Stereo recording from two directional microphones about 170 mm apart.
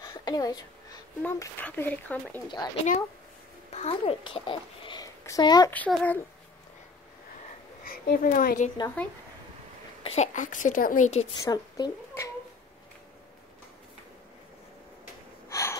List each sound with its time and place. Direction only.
0.0 s a sound: 25° left (ahead or behind)
1.2 s speech: 10° left (ahead or behind)
2.4 s speech: 25° left (ahead or behind)
3.7 s a child's voice: 35° left (ahead or behind)
5.7 s speech: 10° left (ahead or behind)
7.8 s speech: 55° left (ahead or behind)
9.0 s speech: 10° left (ahead or behind)
10.0 s a woman's voice: 40° left (ahead or behind)
11.3 s speech: 20° left (ahead or behind)
15.5 s gasp: 20° left (ahead or behind)